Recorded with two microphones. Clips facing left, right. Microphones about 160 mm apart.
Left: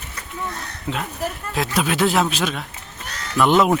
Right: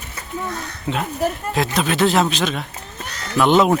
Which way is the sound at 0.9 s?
5° right (ahead or behind).